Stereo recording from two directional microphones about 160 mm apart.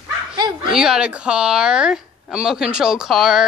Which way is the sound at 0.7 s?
5° right (ahead or behind).